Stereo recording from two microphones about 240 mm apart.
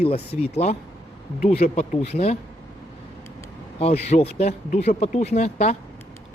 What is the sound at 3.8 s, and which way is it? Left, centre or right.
Speech, left.